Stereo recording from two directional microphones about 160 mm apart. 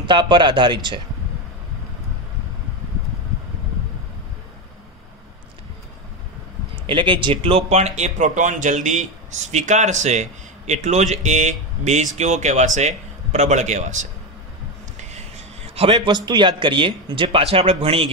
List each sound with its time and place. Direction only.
0.0 s speech: 30° right (ahead or behind)
6.7 s a man's voice: 30° right (ahead or behind)